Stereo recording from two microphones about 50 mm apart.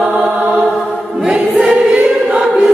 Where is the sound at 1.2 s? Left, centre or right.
Centre.